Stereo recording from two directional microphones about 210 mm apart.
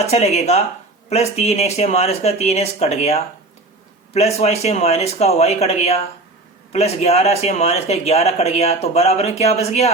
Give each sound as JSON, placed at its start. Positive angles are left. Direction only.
{"t": 0.0, "sound": "speech", "side_deg": 30}